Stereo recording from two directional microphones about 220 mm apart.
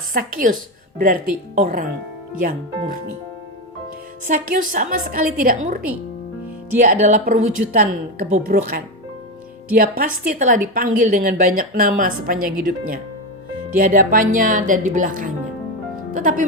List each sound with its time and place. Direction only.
0.1 s a woman's voice: 40° right (ahead or behind)
4.3 s a woman's voice: 35° right (ahead or behind)
8.4 s a woman's voice: 40° right (ahead or behind)